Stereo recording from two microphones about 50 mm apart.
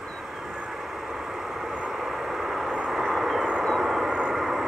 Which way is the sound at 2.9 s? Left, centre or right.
Centre.